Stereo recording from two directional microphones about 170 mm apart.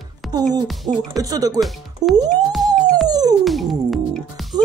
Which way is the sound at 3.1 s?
25° right (ahead or behind).